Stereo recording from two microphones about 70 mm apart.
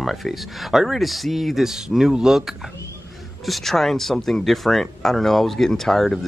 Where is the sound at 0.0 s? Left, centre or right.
Centre.